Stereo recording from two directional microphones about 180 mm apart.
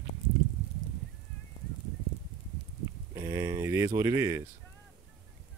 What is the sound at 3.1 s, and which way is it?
Speech, 15° right (ahead or behind).